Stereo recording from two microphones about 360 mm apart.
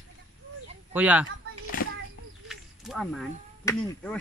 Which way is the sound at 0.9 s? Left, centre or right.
Centre.